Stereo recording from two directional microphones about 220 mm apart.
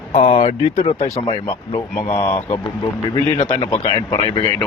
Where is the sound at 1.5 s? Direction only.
15° left (ahead or behind).